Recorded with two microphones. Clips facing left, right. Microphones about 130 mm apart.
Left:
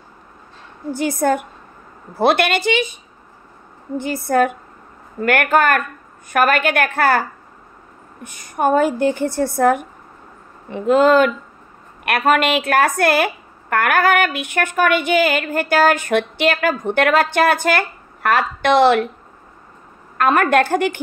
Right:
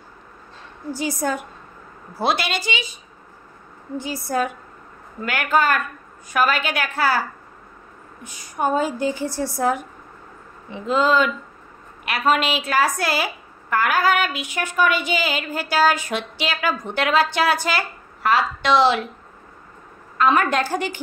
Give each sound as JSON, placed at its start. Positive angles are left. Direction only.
{"t": 0.9, "sound": "a woman's voice", "side_deg": 55}
{"t": 4.0, "sound": "a woman's voice", "side_deg": 55}
{"t": 20.2, "sound": "a woman's voice", "side_deg": 55}